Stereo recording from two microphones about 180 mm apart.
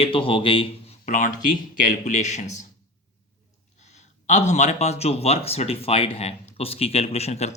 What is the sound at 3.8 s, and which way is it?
A man's voice, 40° left (ahead or behind).